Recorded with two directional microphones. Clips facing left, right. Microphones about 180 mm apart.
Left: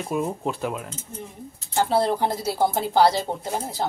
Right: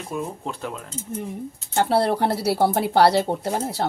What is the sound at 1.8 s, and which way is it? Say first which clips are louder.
Speech: right 1 dB; 65° right (ahead or behind).